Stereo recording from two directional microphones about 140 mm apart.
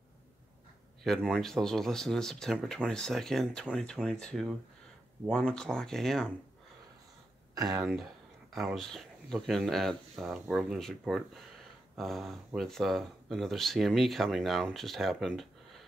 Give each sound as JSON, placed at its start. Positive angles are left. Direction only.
{"t": 1.0, "sound": "speech", "side_deg": 5}
{"t": 7.5, "sound": "speech", "side_deg": -25}
{"t": 7.8, "sound": "speech", "side_deg": 0}